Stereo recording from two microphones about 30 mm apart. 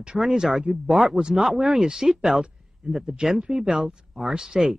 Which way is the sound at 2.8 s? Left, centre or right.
Right.